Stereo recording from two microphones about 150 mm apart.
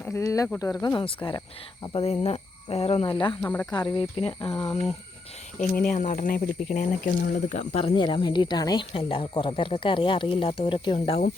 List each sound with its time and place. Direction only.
0.0 s speech: 15° left (ahead or behind); by 3.3 s 35° left (ahead or behind)
3.4 s speech: 15° left (ahead or behind)
3.7 s speech: 30° left (ahead or behind)
5.8 s speech: 60° left (ahead or behind); by 11.2 s 40° left (ahead or behind)